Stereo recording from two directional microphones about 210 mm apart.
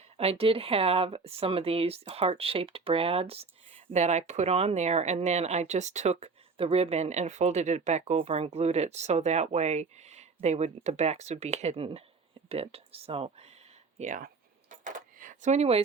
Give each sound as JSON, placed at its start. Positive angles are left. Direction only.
{"t": 0.2, "sound": "speech", "side_deg": -25}
{"t": 14.7, "sound": "keys jangling", "side_deg": -40}